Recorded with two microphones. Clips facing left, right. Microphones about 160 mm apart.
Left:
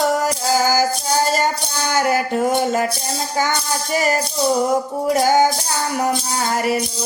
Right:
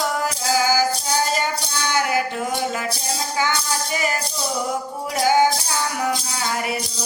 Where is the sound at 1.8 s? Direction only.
45° left (ahead or behind).